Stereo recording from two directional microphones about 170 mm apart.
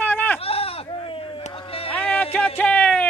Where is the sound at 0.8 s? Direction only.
30° left (ahead or behind).